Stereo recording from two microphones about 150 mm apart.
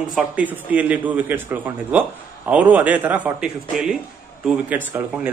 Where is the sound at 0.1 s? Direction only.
10° right (ahead or behind).